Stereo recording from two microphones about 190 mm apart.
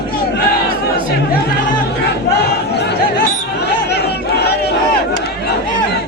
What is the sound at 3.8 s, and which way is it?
Crowd, 60° left (ahead or behind).